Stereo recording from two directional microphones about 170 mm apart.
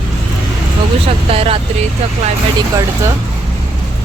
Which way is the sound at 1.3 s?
35° right (ahead or behind).